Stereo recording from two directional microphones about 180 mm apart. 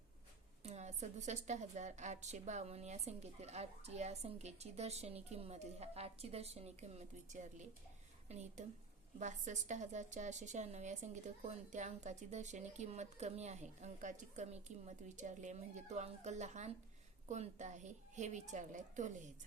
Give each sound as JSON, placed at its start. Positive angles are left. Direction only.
{"t": 0.6, "sound": "a woman's voice", "side_deg": -40}